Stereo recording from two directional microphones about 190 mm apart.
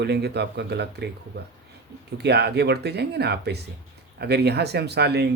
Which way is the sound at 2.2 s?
60° right (ahead or behind).